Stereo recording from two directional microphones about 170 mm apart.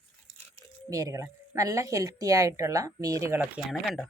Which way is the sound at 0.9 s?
20° right (ahead or behind).